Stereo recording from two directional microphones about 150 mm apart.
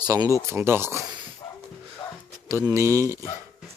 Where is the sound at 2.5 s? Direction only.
20° right (ahead or behind).